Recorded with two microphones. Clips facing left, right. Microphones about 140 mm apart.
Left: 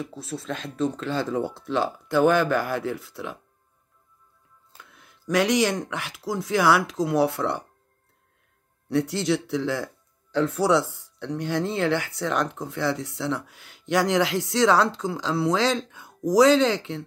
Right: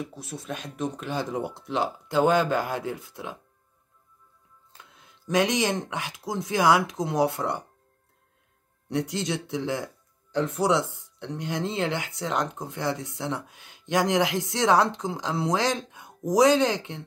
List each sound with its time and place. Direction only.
0.1 s speech: 15° right (ahead or behind)
4.8 s a sound: 20° right (ahead or behind)
5.3 s speech: 20° right (ahead or behind)
8.8 s speech: 15° right (ahead or behind)